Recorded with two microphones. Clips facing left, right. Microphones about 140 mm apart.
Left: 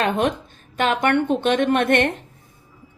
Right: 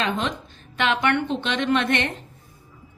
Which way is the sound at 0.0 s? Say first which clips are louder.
Left 5 dB; 50° left (ahead or behind).